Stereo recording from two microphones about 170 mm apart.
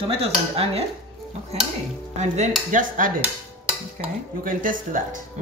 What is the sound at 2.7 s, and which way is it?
Speech, 55° right (ahead or behind).